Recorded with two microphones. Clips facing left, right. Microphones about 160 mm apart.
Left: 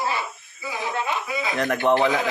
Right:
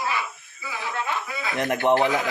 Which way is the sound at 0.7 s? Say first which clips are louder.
Left 2 dB; 20° left (ahead or behind).